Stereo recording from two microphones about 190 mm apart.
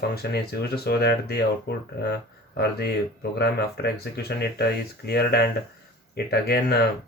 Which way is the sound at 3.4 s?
60° left (ahead or behind).